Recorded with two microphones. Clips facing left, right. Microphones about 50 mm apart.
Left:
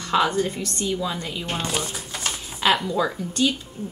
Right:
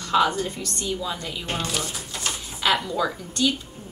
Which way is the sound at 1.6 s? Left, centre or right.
Left.